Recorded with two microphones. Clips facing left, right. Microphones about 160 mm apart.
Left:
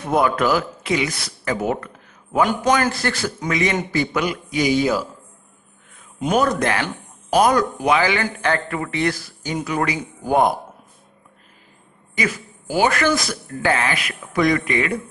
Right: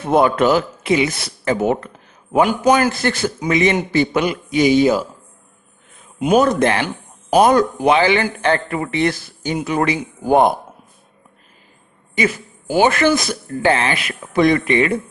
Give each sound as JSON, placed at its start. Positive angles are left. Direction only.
{"t": 0.0, "sound": "speech", "side_deg": -25}
{"t": 6.3, "sound": "speech", "side_deg": -25}
{"t": 12.2, "sound": "speech", "side_deg": -25}